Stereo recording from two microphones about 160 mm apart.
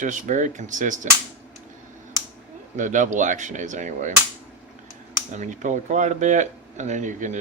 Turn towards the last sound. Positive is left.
turn(degrees=-50)  # may be behind; listen again after turning